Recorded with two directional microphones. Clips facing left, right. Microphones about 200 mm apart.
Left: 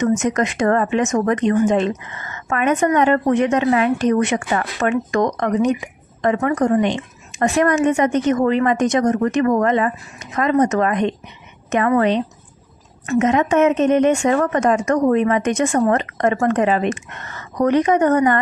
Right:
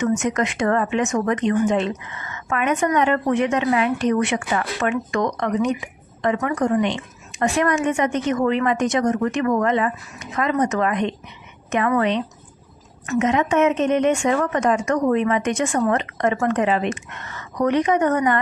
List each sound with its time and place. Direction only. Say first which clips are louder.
0.2 s a woman's voice: left 3 dB; 40° left (ahead or behind)
13.2 s a woman's voice: left 3 dB; 45° left (ahead or behind)